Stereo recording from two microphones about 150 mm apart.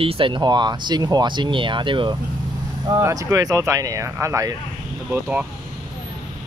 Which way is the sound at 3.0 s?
20° right (ahead or behind).